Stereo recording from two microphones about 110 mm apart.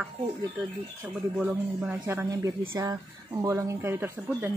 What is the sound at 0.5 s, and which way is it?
Speech, 10° right (ahead or behind).